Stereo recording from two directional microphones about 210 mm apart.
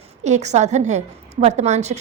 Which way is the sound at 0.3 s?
35° right (ahead or behind).